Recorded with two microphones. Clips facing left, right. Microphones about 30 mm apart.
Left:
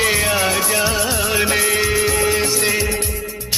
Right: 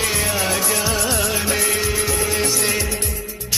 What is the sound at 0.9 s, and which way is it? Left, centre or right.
Music, centre.